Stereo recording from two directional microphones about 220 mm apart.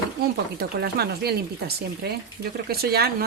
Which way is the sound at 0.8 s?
45° right (ahead or behind).